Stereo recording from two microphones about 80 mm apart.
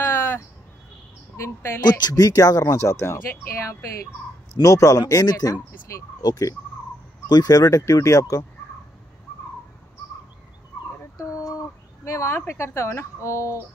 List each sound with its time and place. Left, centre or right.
0.0 s a sound: left
1.3 s speech: left
1.9 s speech: left
12.0 s speech: left